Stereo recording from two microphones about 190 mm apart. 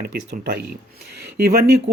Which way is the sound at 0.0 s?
55° right (ahead or behind).